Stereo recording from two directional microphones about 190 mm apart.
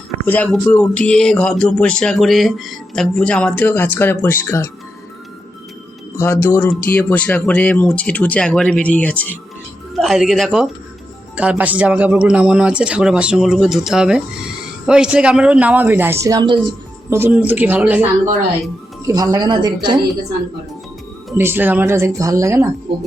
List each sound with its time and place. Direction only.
0.3 s speech: 5° left (ahead or behind)
6.1 s speech: 15° left (ahead or behind); by 18.1 s 5° right (ahead or behind)
19.0 s speech: 20° right (ahead or behind)
21.3 s speech: 10° right (ahead or behind)